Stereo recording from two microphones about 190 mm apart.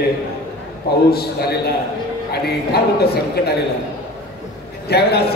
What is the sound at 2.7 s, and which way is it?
Speech, 55° left (ahead or behind).